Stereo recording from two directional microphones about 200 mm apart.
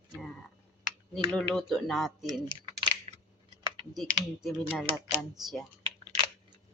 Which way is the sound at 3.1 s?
30° right (ahead or behind).